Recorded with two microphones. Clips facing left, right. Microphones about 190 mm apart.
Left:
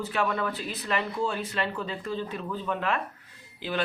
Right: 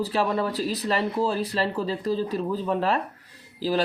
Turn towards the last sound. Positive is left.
turn(degrees=-35)  # may be behind; listen again after turning